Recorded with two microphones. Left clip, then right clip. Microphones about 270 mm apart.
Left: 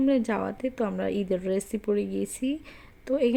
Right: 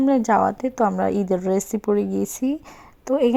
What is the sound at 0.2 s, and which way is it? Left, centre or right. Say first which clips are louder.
A woman's voice: right 10 dB; centre.